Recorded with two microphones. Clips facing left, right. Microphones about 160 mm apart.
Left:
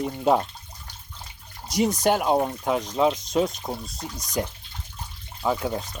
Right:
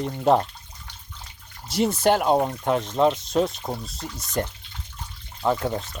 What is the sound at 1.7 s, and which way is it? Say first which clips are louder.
Speech: right 1 dB; 5° right (ahead or behind).